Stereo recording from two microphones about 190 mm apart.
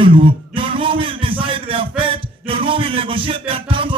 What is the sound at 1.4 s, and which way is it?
Music, 30° right (ahead or behind).